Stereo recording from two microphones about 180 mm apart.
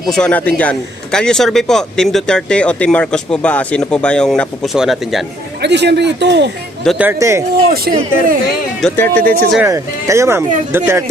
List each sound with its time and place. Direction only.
0.0 s speech: 5° left (ahead or behind)
5.6 s speech: 70° right (ahead or behind)
7.0 s speech: 15° right (ahead or behind)
7.7 s a man's voice: 55° right (ahead or behind)
8.8 s speech: 10° left (ahead or behind)
9.6 s speech: 15° right (ahead or behind)